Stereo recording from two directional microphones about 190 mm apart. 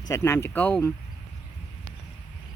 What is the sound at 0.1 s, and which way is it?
Speech, 15° left (ahead or behind).